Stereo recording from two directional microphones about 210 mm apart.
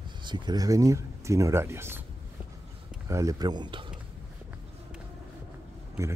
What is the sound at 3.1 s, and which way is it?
Speech, 15° right (ahead or behind).